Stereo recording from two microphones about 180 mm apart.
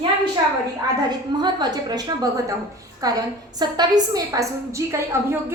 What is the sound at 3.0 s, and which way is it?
A woman's voice, 20° right (ahead or behind).